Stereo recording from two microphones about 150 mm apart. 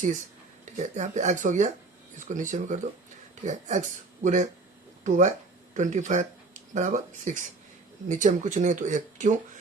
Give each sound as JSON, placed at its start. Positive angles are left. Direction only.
{"t": 0.6, "sound": "speech", "side_deg": -50}